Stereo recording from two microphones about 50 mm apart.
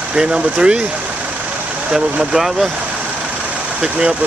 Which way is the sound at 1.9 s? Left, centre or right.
Centre.